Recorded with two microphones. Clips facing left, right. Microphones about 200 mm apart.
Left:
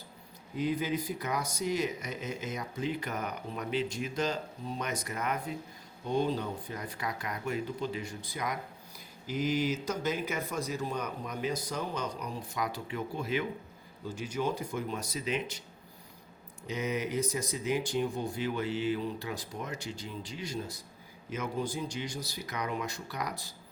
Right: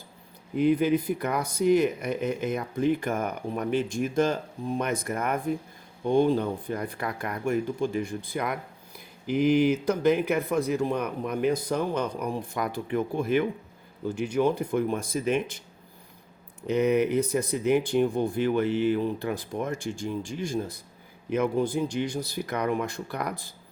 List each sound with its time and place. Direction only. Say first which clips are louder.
0.5 s speech: right 9 dB; 60° right (ahead or behind)
16.6 s speech: right 11 dB; 60° right (ahead or behind)